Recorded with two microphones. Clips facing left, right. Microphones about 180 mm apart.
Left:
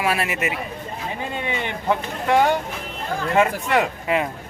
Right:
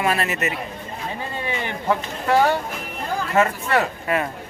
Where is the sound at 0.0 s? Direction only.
10° left (ahead or behind).